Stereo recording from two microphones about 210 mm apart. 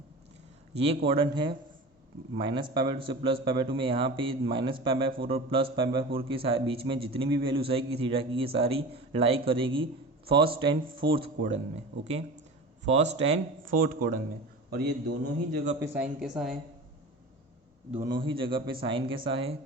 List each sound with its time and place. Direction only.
0.8 s a man's voice: 25° right (ahead or behind)
12.8 s speech: 30° right (ahead or behind); by 15.1 s 50° right (ahead or behind)
15.5 s speech: 35° right (ahead or behind)
15.8 s a woman's voice: 10° right (ahead or behind)
18.1 s a man's voice: 25° right (ahead or behind)